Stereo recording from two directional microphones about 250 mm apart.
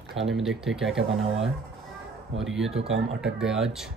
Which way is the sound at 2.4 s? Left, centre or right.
Centre.